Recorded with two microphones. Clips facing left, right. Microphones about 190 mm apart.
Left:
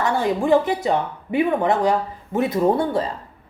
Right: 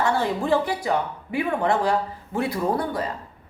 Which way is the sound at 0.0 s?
15° left (ahead or behind).